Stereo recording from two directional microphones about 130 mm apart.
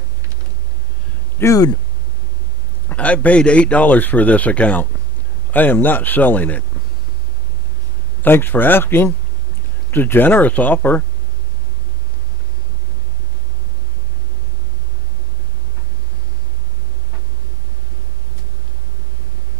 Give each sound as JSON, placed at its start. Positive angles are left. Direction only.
{"t": 1.4, "sound": "speech", "side_deg": 25}
{"t": 2.9, "sound": "a man's voice", "side_deg": 10}
{"t": 8.2, "sound": "a man's voice", "side_deg": 15}